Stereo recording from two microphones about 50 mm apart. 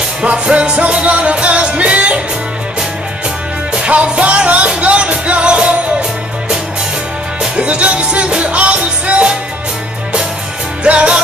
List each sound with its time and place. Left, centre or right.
0.2 s music: right
3.8 s music: right
7.5 s music: right
10.8 s music: right